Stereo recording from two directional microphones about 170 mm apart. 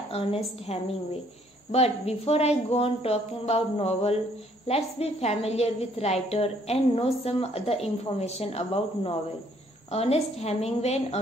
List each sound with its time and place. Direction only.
0.1 s a woman's voice: 35° left (ahead or behind)